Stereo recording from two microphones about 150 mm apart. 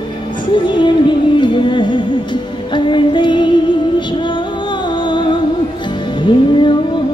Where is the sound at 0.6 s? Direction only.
30° left (ahead or behind).